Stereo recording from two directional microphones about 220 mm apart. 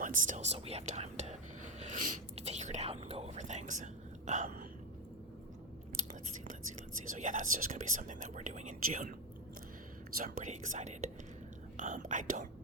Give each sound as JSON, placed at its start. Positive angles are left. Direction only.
{"t": 0.0, "sound": "speech", "side_deg": -35}
{"t": 6.5, "sound": "speech", "side_deg": -35}
{"t": 10.2, "sound": "speech", "side_deg": -35}